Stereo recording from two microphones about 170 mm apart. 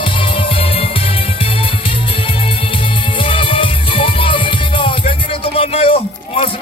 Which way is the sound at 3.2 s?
30° left (ahead or behind).